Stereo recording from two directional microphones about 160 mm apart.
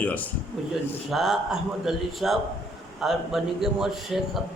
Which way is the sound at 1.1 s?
Centre (ahead or behind).